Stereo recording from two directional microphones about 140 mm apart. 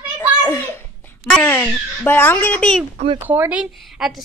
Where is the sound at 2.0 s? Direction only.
15° left (ahead or behind).